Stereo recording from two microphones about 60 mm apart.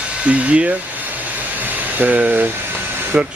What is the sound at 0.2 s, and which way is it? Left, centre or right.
Hair dryer, right.